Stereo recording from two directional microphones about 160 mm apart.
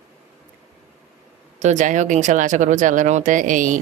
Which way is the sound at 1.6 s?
50° right (ahead or behind).